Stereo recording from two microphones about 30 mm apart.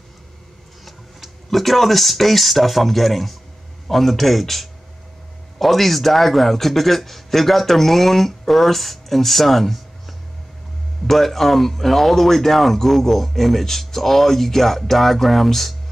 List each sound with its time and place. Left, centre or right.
0.8 s speech: centre